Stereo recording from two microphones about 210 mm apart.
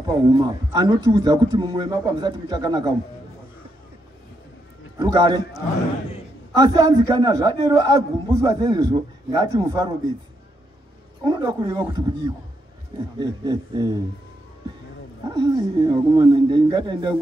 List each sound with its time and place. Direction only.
0.0 s a man's voice: 20° right (ahead or behind)
4.9 s a man's voice: 20° right (ahead or behind)
6.6 s a man's voice: 20° right (ahead or behind)
11.2 s a man's voice: 20° right (ahead or behind)
13.2 s a man's voice: 20° right (ahead or behind)
15.2 s a man's voice: 20° right (ahead or behind)